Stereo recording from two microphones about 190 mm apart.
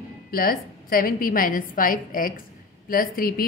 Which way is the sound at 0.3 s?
50° left (ahead or behind).